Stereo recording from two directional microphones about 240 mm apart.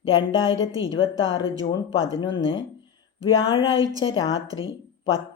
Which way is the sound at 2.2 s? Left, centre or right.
Centre.